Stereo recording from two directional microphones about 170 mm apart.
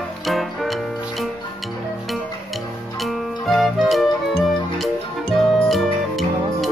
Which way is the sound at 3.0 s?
Centre (ahead or behind).